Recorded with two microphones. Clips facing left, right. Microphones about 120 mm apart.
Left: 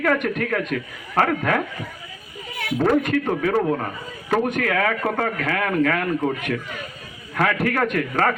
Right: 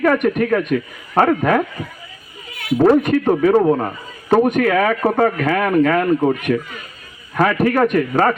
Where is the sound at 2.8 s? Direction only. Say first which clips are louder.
Right 6 dB; 30° right (ahead or behind).